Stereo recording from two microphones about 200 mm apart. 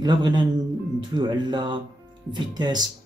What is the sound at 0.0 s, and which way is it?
Speech, 20° right (ahead or behind).